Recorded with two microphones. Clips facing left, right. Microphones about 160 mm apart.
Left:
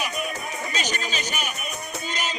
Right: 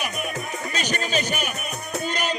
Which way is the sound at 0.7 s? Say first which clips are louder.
Right 5 dB; 55° right (ahead or behind).